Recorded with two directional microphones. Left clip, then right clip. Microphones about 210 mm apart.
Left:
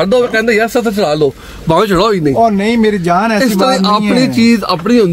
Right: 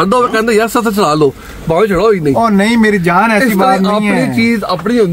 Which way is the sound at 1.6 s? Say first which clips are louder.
Even; 55° left (ahead or behind).